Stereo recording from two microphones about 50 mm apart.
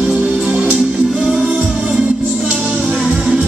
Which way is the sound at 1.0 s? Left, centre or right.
Centre.